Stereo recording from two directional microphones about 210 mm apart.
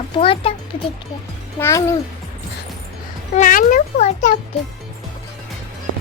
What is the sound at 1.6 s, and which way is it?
Speech, 15° left (ahead or behind).